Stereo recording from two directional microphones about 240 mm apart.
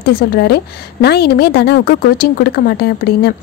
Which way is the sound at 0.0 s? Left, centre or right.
Left.